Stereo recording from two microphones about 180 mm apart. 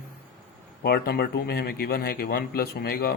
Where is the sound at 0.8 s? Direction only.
60° left (ahead or behind).